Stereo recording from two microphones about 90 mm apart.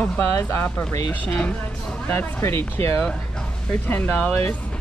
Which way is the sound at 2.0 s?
25° left (ahead or behind).